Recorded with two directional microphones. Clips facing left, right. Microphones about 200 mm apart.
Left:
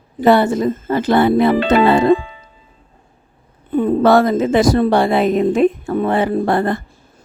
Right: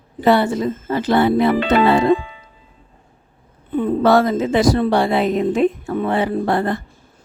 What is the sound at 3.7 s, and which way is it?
A woman's voice, 45° left (ahead or behind).